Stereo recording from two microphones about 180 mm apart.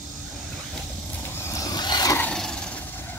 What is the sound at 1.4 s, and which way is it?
Vehicle, 15° left (ahead or behind).